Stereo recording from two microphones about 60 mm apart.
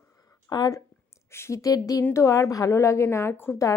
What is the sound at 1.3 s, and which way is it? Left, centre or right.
Speech, left.